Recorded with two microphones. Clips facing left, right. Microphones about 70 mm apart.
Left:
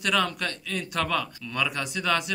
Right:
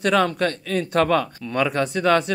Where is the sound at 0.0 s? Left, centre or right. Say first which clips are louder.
Right 7 dB; right.